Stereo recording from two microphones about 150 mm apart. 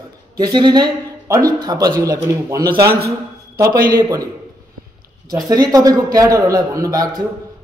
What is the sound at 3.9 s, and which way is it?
Speech, 25° right (ahead or behind).